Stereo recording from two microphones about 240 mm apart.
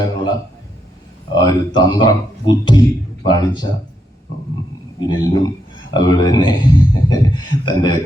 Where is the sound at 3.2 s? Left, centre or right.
Centre.